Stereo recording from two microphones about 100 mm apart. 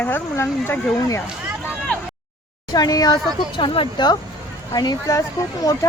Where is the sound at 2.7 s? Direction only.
40° left (ahead or behind).